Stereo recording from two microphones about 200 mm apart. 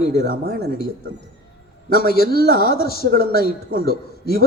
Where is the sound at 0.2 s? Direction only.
45° right (ahead or behind).